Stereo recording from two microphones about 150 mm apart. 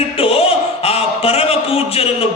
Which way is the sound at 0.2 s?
40° left (ahead or behind).